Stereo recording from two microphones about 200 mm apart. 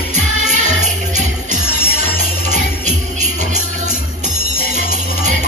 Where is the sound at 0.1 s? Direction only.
35° right (ahead or behind).